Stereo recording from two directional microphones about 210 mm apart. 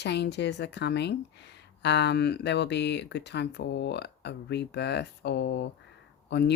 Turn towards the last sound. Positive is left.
turn(degrees=55)  # may be behind; listen again after turning